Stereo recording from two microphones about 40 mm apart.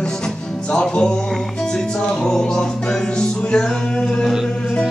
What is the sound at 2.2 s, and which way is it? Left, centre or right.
Music, centre.